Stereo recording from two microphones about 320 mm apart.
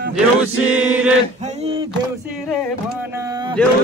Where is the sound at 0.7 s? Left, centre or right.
Centre.